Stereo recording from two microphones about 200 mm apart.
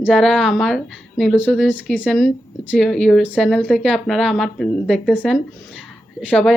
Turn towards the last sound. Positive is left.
turn(degrees=5)  # may be behind; listen again after turning